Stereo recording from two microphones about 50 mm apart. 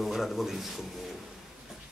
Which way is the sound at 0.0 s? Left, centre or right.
Centre.